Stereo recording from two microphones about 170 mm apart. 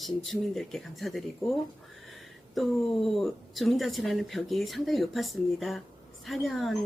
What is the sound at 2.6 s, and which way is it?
Speech, centre (ahead or behind).